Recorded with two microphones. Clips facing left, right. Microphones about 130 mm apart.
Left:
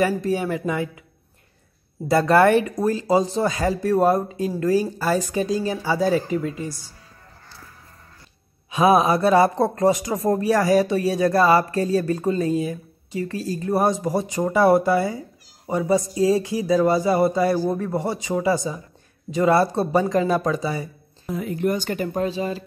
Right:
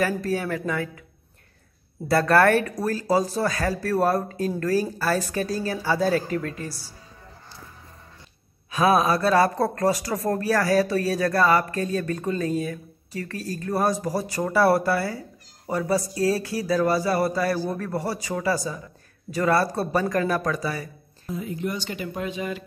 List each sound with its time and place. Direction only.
0.0 s speech: 15° left (ahead or behind)
2.0 s speech: 15° left (ahead or behind)
8.7 s speech: 20° left (ahead or behind)
21.3 s speech: 70° left (ahead or behind); by 22.6 s 30° left (ahead or behind)